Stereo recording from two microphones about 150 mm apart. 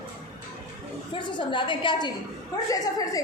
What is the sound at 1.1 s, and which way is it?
A woman's voice, 30° left (ahead or behind).